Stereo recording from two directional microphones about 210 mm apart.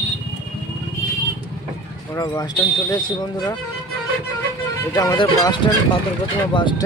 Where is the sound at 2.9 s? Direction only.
20° left (ahead or behind).